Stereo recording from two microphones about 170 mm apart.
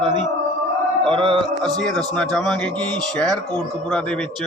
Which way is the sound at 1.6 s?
5° left (ahead or behind).